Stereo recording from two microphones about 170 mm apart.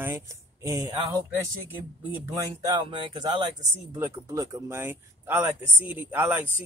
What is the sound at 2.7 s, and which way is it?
Speech, 25° right (ahead or behind).